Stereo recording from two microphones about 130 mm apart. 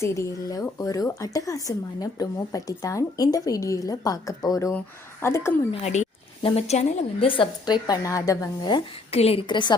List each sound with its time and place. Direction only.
0.0 s speech: 25° left (ahead or behind)
5.7 s a woman's voice: 60° left (ahead or behind); by 8.8 s 30° left (ahead or behind)
9.0 s a woman's voice: 50° left (ahead or behind)
9.5 s a woman's voice: 35° left (ahead or behind)